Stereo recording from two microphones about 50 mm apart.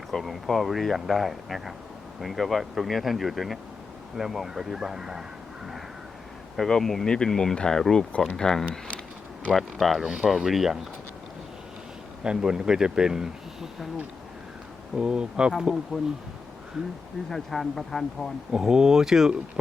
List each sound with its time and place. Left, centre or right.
0.1 s speech: centre
6.6 s speech: centre
9.5 s speech: centre
12.2 s speech: centre
14.9 s speech: centre
17.2 s speech: centre
18.5 s speech: centre